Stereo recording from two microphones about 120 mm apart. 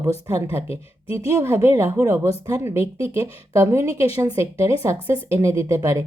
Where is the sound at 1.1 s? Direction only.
25° right (ahead or behind).